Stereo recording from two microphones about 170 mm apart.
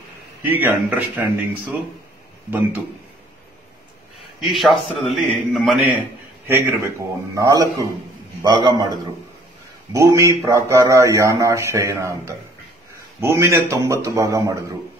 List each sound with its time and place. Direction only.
0.4 s speech: 10° right (ahead or behind)
4.4 s a man's voice: centre (ahead or behind)
6.4 s a man's voice: 15° right (ahead or behind)